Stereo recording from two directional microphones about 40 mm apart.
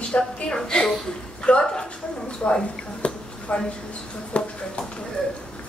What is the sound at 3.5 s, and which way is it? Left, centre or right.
Speech, left.